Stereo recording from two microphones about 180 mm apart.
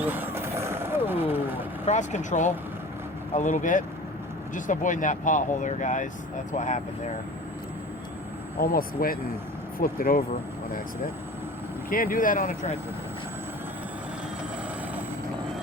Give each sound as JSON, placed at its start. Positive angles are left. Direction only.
{"t": 0.0, "sound": "vehicle", "side_deg": -10}
{"t": 1.8, "sound": "speech", "side_deg": 40}
{"t": 8.6, "sound": "speech", "side_deg": 55}
{"t": 11.9, "sound": "speech", "side_deg": 50}